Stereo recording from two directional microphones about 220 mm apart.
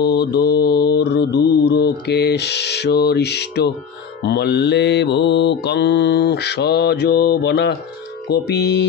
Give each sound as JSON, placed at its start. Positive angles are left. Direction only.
{"t": 0.0, "sound": "mantra", "side_deg": 50}